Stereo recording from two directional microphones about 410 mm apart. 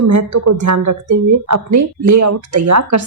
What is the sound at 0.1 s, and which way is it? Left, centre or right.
A woman's voice, right.